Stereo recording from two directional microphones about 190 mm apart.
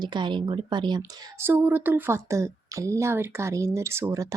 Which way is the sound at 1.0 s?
10° right (ahead or behind).